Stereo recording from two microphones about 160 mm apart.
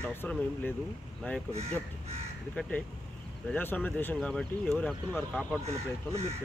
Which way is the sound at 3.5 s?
10° left (ahead or behind).